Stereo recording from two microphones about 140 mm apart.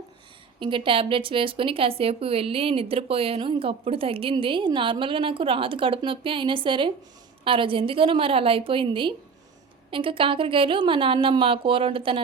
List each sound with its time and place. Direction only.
0.6 s speech: 40° right (ahead or behind)